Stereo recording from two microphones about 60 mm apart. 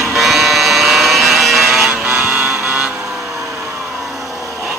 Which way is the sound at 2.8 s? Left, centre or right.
Centre.